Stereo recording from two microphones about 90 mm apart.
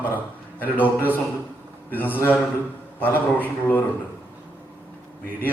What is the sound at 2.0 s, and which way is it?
A man's voice, 20° left (ahead or behind).